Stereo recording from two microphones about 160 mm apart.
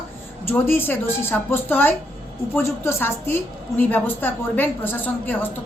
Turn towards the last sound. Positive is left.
turn(degrees=10)  # may be behind; listen again after turning